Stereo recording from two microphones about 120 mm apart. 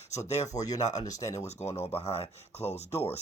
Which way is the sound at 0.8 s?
75° left (ahead or behind).